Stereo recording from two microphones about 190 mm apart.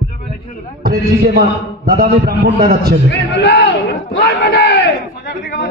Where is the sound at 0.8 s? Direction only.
55° right (ahead or behind).